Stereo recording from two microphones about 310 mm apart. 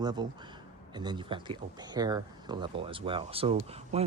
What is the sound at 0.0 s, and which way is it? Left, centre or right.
Speech, centre.